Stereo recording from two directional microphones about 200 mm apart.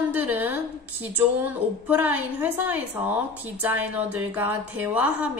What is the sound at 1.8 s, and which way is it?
A woman's voice, 10° right (ahead or behind).